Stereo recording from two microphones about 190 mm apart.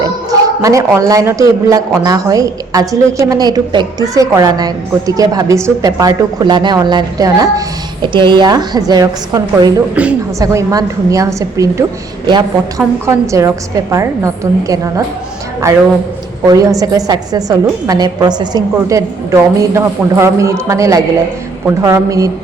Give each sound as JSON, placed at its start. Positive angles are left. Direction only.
{"t": 0.0, "sound": "a man's voice", "side_deg": -20}
{"t": 9.9, "sound": "a woman's voice", "side_deg": -5}
{"t": 10.4, "sound": "a woman's voice", "side_deg": -15}
{"t": 16.5, "sound": "a woman's voice", "side_deg": -20}